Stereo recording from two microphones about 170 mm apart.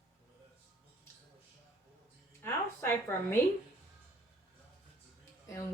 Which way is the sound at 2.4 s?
15° left (ahead or behind).